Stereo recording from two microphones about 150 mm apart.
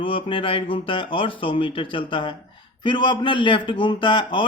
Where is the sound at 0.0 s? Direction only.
35° left (ahead or behind).